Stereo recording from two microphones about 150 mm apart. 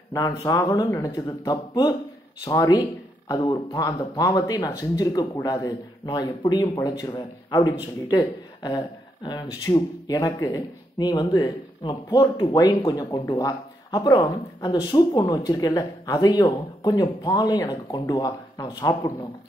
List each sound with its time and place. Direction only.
0.1 s speech: 25° left (ahead or behind)